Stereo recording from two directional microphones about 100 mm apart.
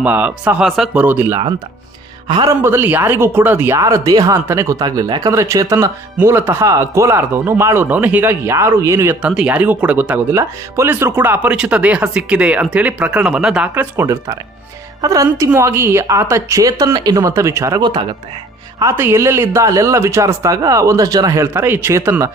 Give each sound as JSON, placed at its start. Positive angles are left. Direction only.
{"t": 0.0, "sound": "speech", "side_deg": -15}
{"t": 0.6, "sound": "speech", "side_deg": 0}
{"t": 0.9, "sound": "a man's voice", "side_deg": -20}
{"t": 2.4, "sound": "a man's voice", "side_deg": -25}
{"t": 3.8, "sound": "a man's voice", "side_deg": -35}
{"t": 4.7, "sound": "a man's voice", "side_deg": -40}
{"t": 9.1, "sound": "speech", "side_deg": -10}
{"t": 10.3, "sound": "speech", "side_deg": -25}
{"t": 13.9, "sound": "a man's voice", "side_deg": -25}
{"t": 17.3, "sound": "a man's voice", "side_deg": -30}
{"t": 17.7, "sound": "a man's voice", "side_deg": -50}
{"t": 18.9, "sound": "speech", "side_deg": -25}
{"t": 21.5, "sound": "a man's voice", "side_deg": -20}